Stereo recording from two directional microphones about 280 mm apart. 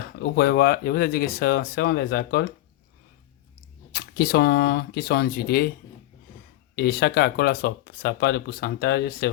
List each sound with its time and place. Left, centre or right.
0.2 s speech: left
3.9 s speech: left
6.7 s speech: left